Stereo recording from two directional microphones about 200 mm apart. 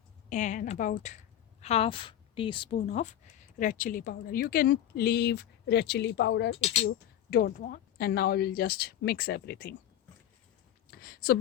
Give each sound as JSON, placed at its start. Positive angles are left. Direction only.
{"t": 0.3, "sound": "a woman's voice", "side_deg": 40}
{"t": 6.5, "sound": "speech", "side_deg": 30}
{"t": 7.3, "sound": "speech", "side_deg": 50}
{"t": 11.0, "sound": "speech", "side_deg": 45}